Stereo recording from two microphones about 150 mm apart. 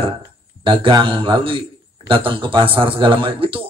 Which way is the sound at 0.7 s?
35° right (ahead or behind).